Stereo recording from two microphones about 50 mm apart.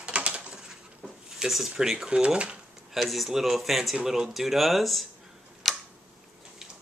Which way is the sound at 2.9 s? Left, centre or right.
Centre.